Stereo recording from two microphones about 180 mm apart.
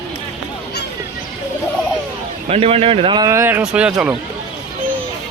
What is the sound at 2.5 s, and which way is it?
A man's voice, 35° right (ahead or behind).